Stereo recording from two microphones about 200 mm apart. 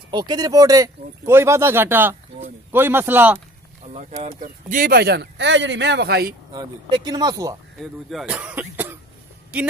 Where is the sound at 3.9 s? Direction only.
35° right (ahead or behind); by 6.3 s 55° right (ahead or behind).